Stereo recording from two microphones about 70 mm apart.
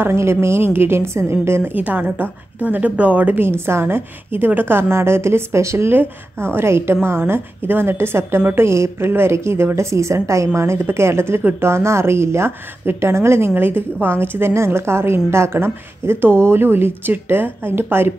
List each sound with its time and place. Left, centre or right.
0.0 s a woman's voice: right
3.4 s a woman's voice: right
13.6 s a woman's voice: right